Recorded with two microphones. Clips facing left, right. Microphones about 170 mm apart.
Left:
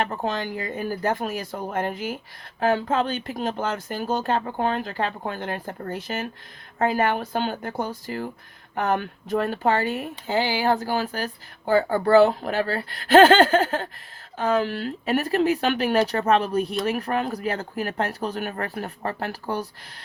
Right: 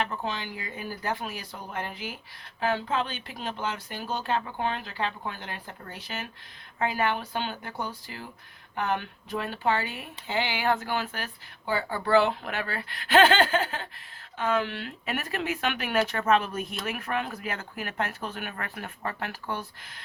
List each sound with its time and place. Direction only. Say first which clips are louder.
0.0 s speech: left 5 dB; 45° left (ahead or behind)